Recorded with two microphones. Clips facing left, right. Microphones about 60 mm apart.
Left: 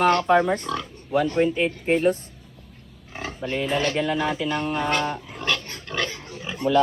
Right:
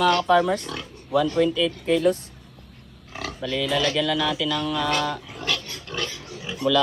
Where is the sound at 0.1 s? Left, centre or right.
Left.